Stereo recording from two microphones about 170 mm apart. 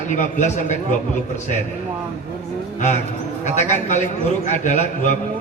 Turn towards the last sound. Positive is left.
turn(degrees=45)  # may be behind; listen again after turning